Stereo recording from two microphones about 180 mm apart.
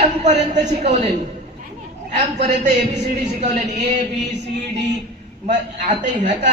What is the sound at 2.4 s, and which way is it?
Speech, 40° right (ahead or behind).